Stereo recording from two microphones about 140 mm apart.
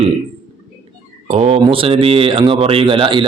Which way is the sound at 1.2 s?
45° right (ahead or behind).